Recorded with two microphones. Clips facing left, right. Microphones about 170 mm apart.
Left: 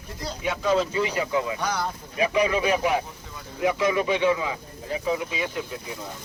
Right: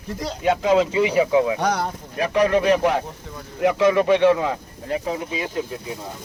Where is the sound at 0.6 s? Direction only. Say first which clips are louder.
Right 4 dB; 90° right.